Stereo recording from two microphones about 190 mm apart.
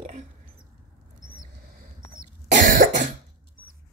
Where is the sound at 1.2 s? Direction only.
45° right (ahead or behind).